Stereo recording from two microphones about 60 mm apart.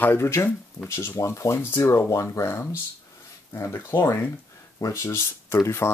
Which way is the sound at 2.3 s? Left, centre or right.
Left.